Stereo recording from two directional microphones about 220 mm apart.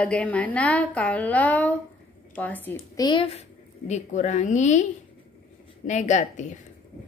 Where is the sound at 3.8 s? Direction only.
30° left (ahead or behind).